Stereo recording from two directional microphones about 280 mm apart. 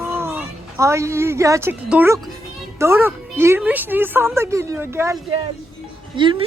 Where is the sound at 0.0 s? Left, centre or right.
Centre.